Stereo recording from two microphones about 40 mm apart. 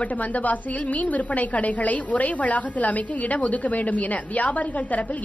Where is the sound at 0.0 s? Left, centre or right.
Left.